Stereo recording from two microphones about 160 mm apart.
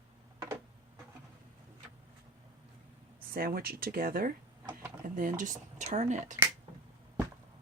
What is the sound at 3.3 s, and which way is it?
Speech, 65° right (ahead or behind).